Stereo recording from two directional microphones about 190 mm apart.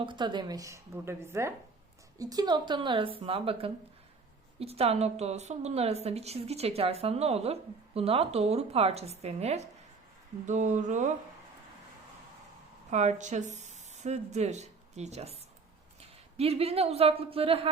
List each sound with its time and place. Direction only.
0.0 s a woman's voice: 25° right (ahead or behind)
12.9 s speech: 35° right (ahead or behind)